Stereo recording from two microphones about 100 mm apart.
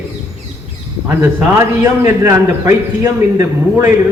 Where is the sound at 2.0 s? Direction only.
25° right (ahead or behind).